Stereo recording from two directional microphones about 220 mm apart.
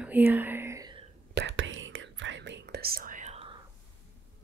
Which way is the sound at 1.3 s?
55° right (ahead or behind).